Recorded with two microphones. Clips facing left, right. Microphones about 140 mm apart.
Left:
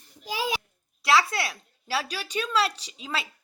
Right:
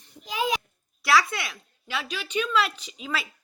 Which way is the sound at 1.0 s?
25° left (ahead or behind).